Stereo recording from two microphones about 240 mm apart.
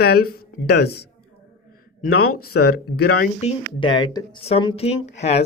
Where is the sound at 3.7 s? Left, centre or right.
Centre.